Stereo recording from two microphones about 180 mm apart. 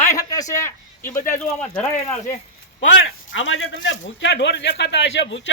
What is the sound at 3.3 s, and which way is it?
A man's voice, 90° left.